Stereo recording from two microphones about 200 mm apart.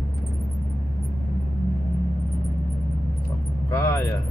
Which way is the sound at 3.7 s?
15° left (ahead or behind).